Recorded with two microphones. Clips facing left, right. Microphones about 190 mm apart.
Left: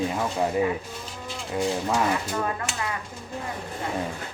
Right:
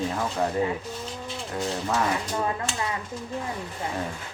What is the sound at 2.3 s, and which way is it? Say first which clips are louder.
Speech: even; 20° right (ahead or behind).